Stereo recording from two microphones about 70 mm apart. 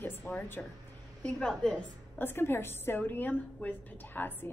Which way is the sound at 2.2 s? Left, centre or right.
Left.